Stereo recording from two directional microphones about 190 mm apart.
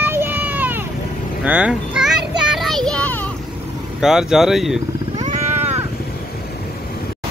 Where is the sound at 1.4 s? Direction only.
5° right (ahead or behind); by 3.3 s 10° left (ahead or behind).